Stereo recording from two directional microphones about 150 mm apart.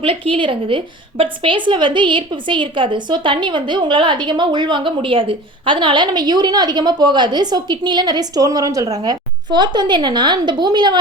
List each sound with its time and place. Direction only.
0.0 s a woman's voice: 35° right (ahead or behind)